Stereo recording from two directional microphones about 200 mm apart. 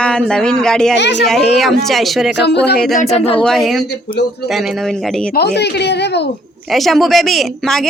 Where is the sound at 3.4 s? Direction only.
Centre (ahead or behind).